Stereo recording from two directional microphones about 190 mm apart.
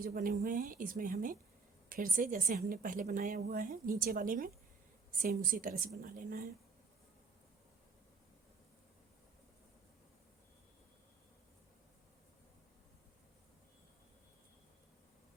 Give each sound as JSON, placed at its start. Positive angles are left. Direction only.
{"t": 0.0, "sound": "a woman's voice", "side_deg": -45}